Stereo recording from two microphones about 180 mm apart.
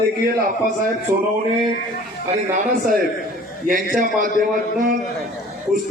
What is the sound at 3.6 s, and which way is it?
Speech, 50° right (ahead or behind).